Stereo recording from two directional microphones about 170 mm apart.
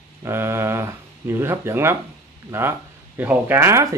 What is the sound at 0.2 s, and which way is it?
Speech, 15° right (ahead or behind).